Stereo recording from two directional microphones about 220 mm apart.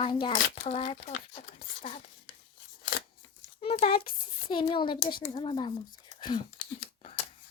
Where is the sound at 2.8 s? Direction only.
55° left (ahead or behind).